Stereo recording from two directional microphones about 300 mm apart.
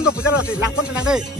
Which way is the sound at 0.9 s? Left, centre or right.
Centre.